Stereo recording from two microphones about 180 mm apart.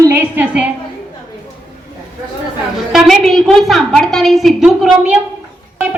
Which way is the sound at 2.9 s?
Centre (ahead or behind).